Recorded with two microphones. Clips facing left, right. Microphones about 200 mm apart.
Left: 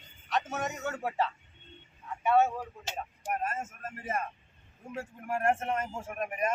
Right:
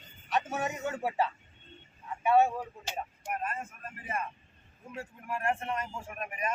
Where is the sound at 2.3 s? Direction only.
10° right (ahead or behind).